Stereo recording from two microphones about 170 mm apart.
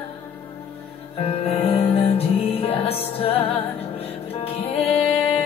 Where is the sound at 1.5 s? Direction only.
35° left (ahead or behind).